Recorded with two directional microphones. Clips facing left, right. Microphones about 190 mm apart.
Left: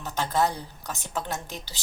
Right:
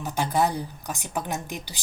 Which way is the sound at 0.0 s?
15° right (ahead or behind).